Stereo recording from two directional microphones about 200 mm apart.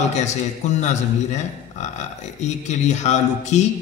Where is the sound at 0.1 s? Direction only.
35° left (ahead or behind).